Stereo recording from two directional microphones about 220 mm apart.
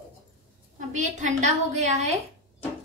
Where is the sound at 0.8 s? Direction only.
35° right (ahead or behind).